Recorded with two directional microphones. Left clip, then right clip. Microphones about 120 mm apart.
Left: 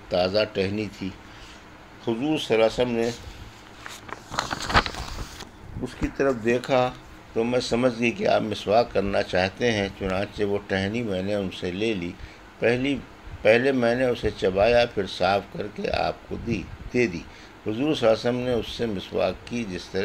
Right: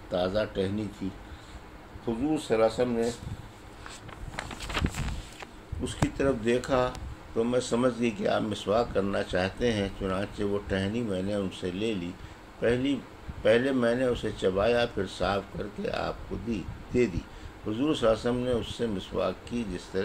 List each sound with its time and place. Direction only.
0.1 s speech: 50° left (ahead or behind)
2.3 s speech: 45° left (ahead or behind)
6.1 s speech: 35° left (ahead or behind)